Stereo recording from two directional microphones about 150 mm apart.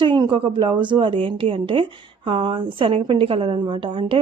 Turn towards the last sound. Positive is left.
turn(degrees=-35)  # may be behind; listen again after turning